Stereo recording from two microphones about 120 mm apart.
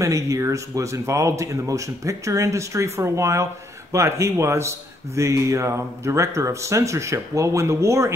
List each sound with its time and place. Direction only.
0.0 s speech: 25° right (ahead or behind)